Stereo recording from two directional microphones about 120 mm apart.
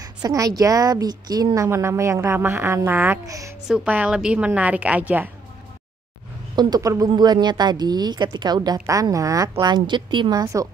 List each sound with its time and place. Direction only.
0.0 s a woman's voice: 30° right (ahead or behind)
3.6 s a woman's voice: 10° right (ahead or behind)
6.5 s a woman's voice: 35° right (ahead or behind)
10.4 s a woman's voice: 30° right (ahead or behind)